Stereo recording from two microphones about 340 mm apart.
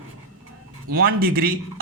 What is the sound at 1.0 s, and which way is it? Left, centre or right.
Speech, right.